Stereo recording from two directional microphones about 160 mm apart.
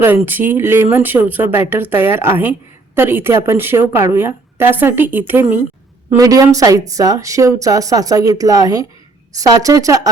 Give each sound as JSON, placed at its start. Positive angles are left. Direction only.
{"t": 0.0, "sound": "speech", "side_deg": -10}